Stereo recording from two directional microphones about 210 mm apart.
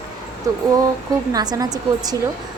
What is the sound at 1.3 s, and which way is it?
Speech, 20° right (ahead or behind).